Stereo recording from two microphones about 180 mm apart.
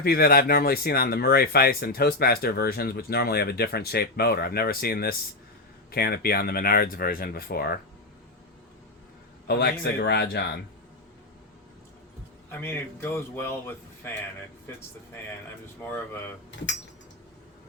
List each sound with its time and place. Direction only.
0.0 s speech: 55° left (ahead or behind)
9.5 s speech: 60° left (ahead or behind)
12.5 s a man's voice: 10° left (ahead or behind)
15.8 s a man's voice: 10° left (ahead or behind)